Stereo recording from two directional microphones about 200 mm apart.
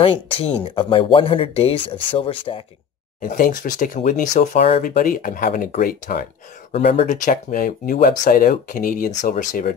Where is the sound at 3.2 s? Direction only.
45° left (ahead or behind).